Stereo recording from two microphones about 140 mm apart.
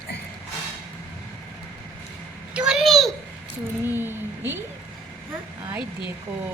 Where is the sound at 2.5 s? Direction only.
5° right (ahead or behind).